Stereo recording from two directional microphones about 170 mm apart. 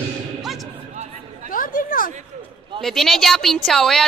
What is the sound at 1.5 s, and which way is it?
Chatter, 55° left (ahead or behind).